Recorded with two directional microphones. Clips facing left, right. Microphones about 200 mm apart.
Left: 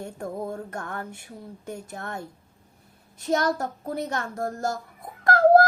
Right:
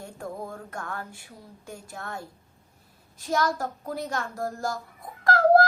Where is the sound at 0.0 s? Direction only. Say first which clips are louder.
Left 4 dB; 20° left (ahead or behind).